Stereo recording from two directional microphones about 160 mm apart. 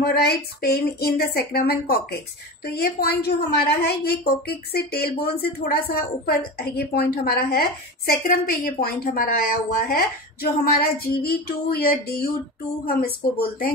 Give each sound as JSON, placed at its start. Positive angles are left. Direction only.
{"t": 0.0, "sound": "a woman's voice", "side_deg": 75}
{"t": 8.1, "sound": "a woman's voice", "side_deg": 65}